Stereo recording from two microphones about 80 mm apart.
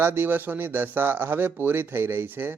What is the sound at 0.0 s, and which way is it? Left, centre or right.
Speech, right.